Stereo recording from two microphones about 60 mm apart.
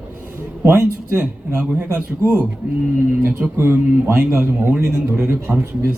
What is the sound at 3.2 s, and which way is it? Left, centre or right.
A man's voice, right.